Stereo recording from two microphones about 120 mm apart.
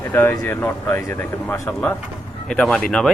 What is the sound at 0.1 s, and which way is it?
Speech, 20° left (ahead or behind).